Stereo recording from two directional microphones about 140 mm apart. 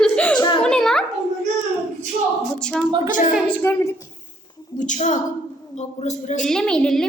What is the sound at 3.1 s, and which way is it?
Speech, 70° left (ahead or behind).